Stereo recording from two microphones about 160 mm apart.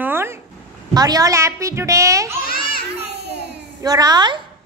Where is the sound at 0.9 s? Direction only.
25° right (ahead or behind).